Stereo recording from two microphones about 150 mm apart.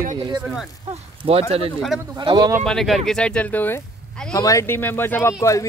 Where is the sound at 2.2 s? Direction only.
30° right (ahead or behind).